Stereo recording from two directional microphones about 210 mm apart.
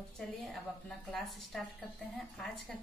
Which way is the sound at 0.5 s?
Centre (ahead or behind).